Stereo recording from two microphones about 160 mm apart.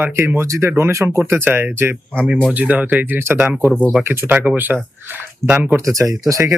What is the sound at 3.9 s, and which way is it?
Speech, 10° right (ahead or behind).